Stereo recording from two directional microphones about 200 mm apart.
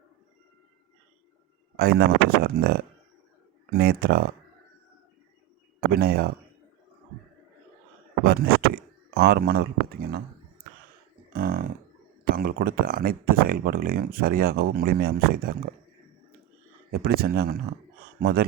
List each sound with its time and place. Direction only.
1.7 s speech: 50° right (ahead or behind)
5.9 s speech: 50° right (ahead or behind)
8.2 s speech: 50° right (ahead or behind)
11.3 s speech: 45° right (ahead or behind)
16.9 s speech: 50° right (ahead or behind)